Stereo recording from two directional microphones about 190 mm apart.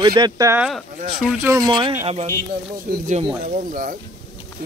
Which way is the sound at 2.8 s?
40° right (ahead or behind).